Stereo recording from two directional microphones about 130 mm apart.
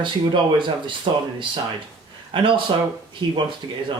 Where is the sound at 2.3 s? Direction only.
40° right (ahead or behind).